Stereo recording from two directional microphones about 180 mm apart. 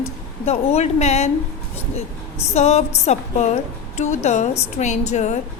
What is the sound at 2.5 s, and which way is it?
Speech, 35° left (ahead or behind).